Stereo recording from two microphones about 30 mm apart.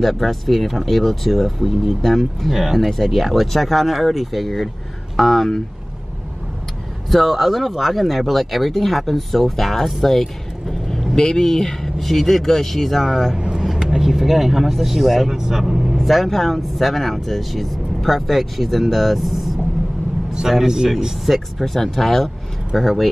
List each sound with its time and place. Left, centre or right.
0.0 s speech: centre
7.1 s speech: centre
10.0 s vehicle: centre
11.1 s speech: left
11.5 s speech: centre
13.7 s speech: centre
16.0 s speech: centre
20.4 s speech: centre
21.3 s speech: centre